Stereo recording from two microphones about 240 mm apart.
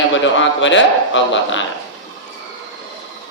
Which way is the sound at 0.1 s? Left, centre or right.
Left.